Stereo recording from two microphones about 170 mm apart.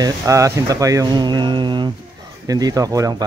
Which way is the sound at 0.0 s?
20° right (ahead or behind).